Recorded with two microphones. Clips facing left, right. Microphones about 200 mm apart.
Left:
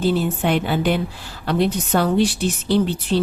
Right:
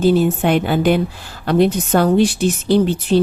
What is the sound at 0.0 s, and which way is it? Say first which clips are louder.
A woman's voice: right 5 dB; 45° right (ahead or behind).